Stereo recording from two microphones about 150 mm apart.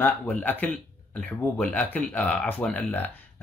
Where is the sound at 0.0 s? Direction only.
10° left (ahead or behind).